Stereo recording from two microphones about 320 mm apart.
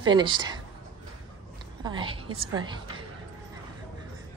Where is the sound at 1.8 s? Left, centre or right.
Centre.